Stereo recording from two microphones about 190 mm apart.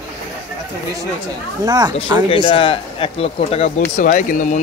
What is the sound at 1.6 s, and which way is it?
Speech, 20° right (ahead or behind).